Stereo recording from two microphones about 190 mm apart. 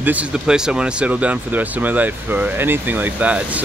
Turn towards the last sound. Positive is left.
turn(degrees=-5)  # may be behind; listen again after turning